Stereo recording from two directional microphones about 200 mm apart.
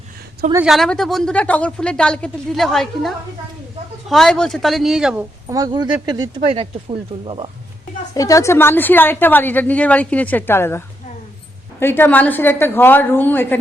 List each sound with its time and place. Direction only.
0.5 s a woman's voice: 5° right (ahead or behind)
5.5 s speech: 20° right (ahead or behind)
8.1 s a woman's voice: 15° left (ahead or behind)